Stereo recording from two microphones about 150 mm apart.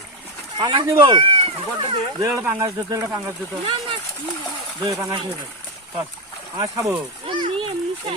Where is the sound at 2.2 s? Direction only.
15° right (ahead or behind).